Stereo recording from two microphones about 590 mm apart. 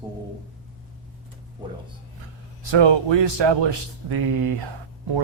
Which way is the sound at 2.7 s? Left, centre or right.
Right.